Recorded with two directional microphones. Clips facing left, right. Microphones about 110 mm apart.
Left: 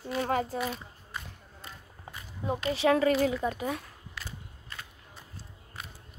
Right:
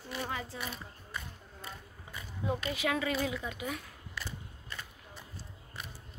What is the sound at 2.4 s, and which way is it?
Speech, 30° left (ahead or behind).